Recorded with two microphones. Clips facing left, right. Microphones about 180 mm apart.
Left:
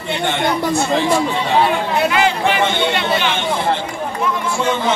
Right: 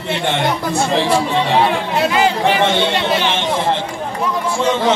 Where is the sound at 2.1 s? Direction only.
35° right (ahead or behind).